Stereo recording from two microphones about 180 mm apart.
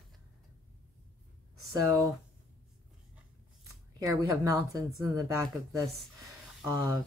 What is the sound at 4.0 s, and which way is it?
A woman's voice, 20° right (ahead or behind).